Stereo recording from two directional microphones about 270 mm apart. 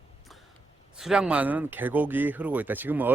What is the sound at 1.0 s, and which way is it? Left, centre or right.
Speech, centre.